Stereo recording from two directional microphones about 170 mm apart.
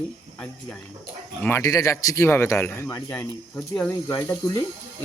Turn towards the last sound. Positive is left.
turn(degrees=15)  # may be behind; listen again after turning